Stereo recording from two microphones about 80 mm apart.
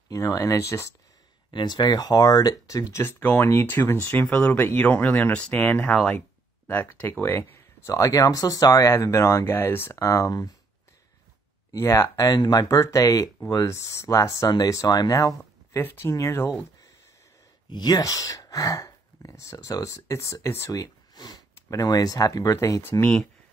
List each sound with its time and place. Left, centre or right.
0.1 s speech: left
1.5 s speech: left
3.0 s speech: left
4.1 s speech: centre
7.9 s speech: left
9.9 s speech: left
11.7 s speech: left
15.8 s speech: left
16.1 s speech: left
17.6 s speech: left
20.7 s speech: left
22.8 s speech: left